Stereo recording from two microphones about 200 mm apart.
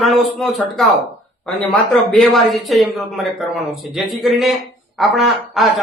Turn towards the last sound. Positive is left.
turn(degrees=0)  # may be behind; listen again after turning